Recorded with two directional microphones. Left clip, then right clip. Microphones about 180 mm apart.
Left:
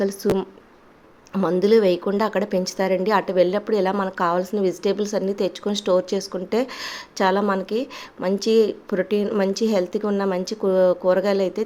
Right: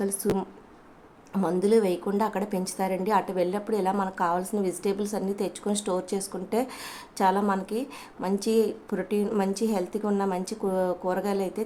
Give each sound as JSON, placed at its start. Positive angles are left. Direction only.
{"t": 0.0, "sound": "a woman's voice", "side_deg": 20}
{"t": 1.3, "sound": "a woman's voice", "side_deg": 20}